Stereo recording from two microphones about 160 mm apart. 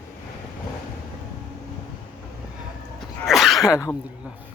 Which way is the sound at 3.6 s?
20° left (ahead or behind).